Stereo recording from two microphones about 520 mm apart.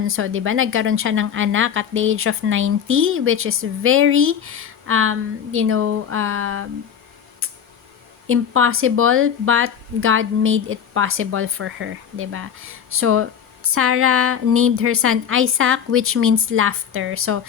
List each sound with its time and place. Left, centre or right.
0.1 s speech: right
8.3 s speech: right